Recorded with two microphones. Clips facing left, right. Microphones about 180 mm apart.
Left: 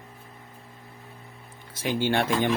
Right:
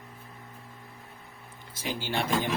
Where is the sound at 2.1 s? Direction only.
60° left (ahead or behind).